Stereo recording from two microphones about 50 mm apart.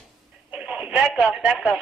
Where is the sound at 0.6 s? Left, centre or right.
Centre.